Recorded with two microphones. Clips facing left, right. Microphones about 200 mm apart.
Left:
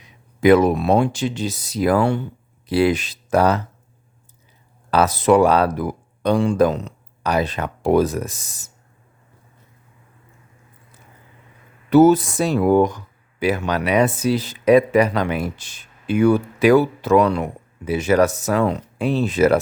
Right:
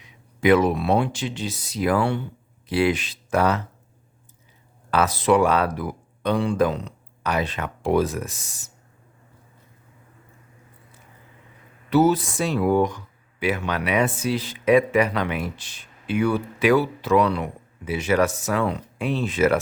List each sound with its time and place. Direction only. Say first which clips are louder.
0.4 s speech: left 4 dB; 40° left (ahead or behind)
4.9 s speech: left 4 dB; 40° left (ahead or behind)
11.9 s speech: left 6 dB; 45° left (ahead or behind)